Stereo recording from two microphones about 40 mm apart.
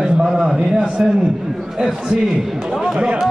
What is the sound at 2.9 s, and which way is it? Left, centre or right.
Speech, right.